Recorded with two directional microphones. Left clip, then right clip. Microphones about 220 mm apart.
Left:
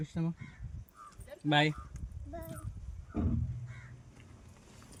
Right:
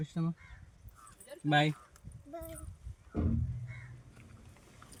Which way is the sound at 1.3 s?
50° right (ahead or behind).